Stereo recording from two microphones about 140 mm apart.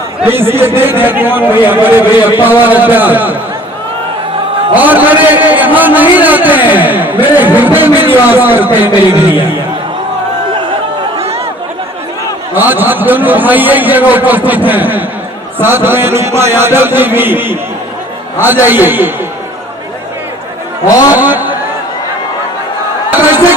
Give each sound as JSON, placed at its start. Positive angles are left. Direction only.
{"t": 0.2, "sound": "a man's voice", "side_deg": -15}
{"t": 4.7, "sound": "a man's voice", "side_deg": -10}
{"t": 11.2, "sound": "chatter", "side_deg": -45}
{"t": 12.5, "sound": "a man's voice", "side_deg": -15}
{"t": 20.8, "sound": "a man's voice", "side_deg": 25}
{"t": 21.2, "sound": "a sound", "side_deg": -15}
{"t": 23.1, "sound": "a sound", "side_deg": -15}